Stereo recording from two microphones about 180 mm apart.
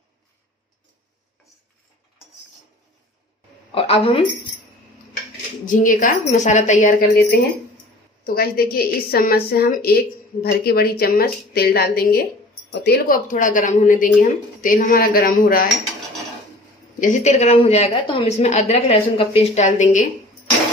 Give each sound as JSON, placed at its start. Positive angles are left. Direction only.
{"t": 3.7, "sound": "a woman's voice", "side_deg": 35}
{"t": 5.7, "sound": "a woman's voice", "side_deg": 45}
{"t": 8.2, "sound": "a woman's voice", "side_deg": 55}
{"t": 17.0, "sound": "a woman's voice", "side_deg": 40}